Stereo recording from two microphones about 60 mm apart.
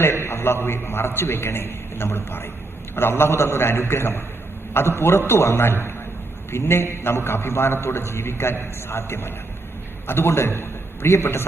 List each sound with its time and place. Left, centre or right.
0.0 s a man's voice: left